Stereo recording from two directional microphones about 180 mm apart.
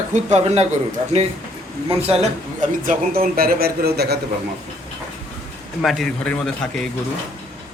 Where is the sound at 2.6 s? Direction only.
50° right (ahead or behind).